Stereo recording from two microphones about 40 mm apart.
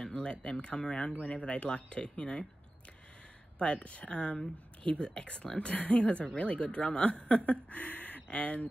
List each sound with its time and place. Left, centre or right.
0.1 s speech: left
3.5 s speech: left